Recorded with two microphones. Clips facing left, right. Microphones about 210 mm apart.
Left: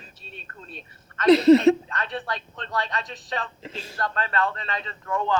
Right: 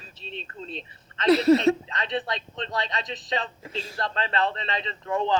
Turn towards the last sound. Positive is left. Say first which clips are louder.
# right 1 dB
turn(degrees=-25)  # may be behind; listen again after turning